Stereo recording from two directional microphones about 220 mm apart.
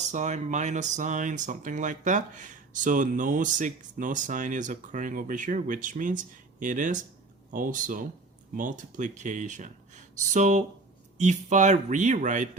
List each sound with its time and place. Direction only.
0.0 s speech: 35° right (ahead or behind)